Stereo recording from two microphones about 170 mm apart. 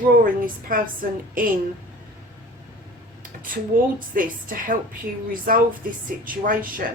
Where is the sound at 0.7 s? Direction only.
55° right (ahead or behind).